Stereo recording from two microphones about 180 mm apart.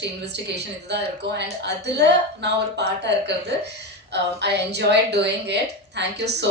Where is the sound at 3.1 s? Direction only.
70° right (ahead or behind).